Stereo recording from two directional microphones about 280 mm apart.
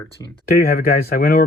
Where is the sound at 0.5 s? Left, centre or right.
Left.